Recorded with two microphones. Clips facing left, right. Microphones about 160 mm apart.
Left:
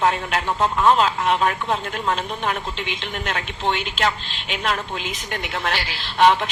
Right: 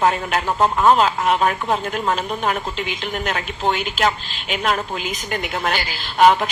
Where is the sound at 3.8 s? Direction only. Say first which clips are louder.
Right 3 dB; 5° right (ahead or behind).